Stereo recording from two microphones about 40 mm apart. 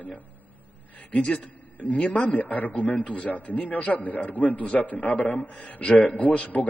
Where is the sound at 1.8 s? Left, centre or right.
Left.